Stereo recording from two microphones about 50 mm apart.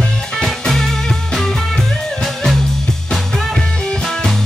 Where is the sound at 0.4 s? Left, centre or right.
Centre.